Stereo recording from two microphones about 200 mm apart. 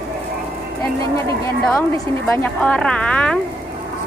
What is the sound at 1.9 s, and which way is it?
A woman's voice, 10° left (ahead or behind).